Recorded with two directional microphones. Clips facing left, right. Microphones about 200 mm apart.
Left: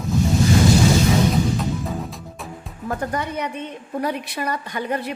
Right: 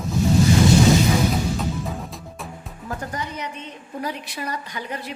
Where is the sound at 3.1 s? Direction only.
60° left (ahead or behind).